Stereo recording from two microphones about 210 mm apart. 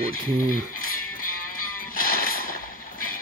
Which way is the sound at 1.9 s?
45° left (ahead or behind).